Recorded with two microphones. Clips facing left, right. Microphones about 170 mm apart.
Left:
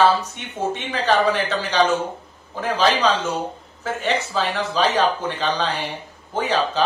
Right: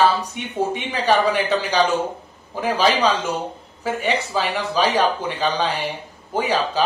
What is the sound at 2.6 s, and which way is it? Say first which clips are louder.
Speech: right 1 dB; 10° right (ahead or behind).